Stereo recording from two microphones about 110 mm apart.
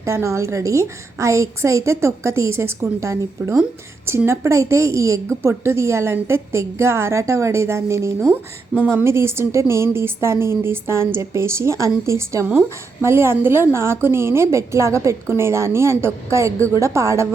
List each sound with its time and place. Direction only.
0.0 s a woman's voice: 25° right (ahead or behind)